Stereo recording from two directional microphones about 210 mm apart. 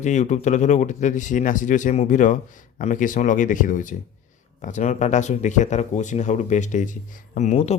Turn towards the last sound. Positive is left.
turn(degrees=30)  # may be behind; listen again after turning